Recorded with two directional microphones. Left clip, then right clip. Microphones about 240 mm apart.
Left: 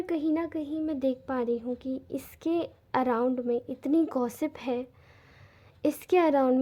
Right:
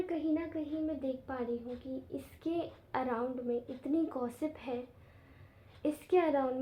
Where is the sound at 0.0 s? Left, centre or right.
Left.